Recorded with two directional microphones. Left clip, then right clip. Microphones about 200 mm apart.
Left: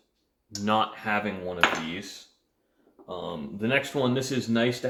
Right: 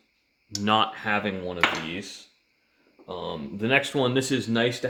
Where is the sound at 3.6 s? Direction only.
55° right (ahead or behind).